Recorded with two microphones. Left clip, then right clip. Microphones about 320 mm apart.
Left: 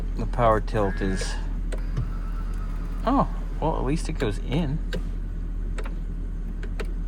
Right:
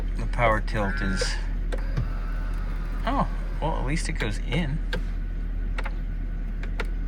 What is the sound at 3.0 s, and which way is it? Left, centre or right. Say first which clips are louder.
Speech: left 4 dB; centre.